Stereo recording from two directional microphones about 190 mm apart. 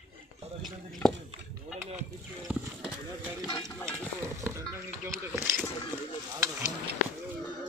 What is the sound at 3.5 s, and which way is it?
Stir, 25° left (ahead or behind).